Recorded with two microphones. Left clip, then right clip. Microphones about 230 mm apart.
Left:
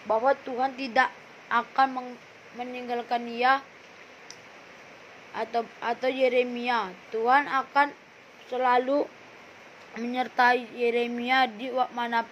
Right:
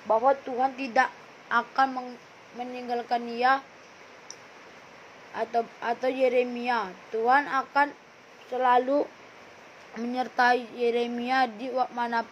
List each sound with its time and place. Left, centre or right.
0.1 s a woman's voice: centre
5.3 s a woman's voice: centre